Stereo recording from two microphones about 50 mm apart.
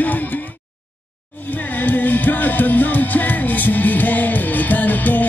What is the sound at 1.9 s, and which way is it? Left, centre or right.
Music, left.